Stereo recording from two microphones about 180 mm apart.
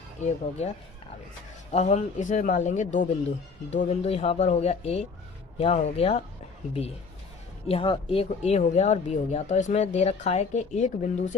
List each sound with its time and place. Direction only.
0.2 s speech: 40° left (ahead or behind)
1.7 s speech: 40° left (ahead or behind)
7.7 s speech: 30° left (ahead or behind)